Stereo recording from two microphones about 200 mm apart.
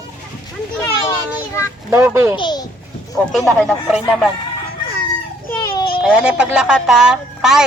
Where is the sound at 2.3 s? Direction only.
20° left (ahead or behind).